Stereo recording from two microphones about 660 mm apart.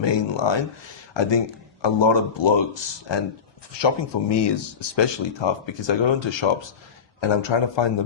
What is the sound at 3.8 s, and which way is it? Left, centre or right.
A man's voice, left.